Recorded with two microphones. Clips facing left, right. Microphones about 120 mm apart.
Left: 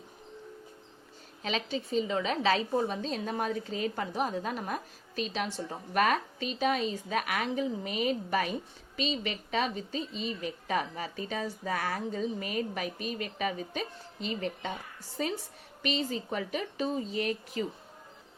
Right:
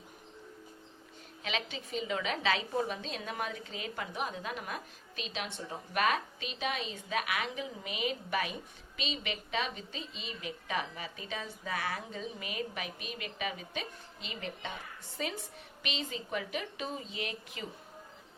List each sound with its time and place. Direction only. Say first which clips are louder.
1.4 s a woman's voice: left 5 dB; 40° left (ahead or behind)